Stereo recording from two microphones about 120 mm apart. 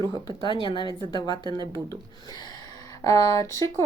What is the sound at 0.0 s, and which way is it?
Speech, 35° left (ahead or behind).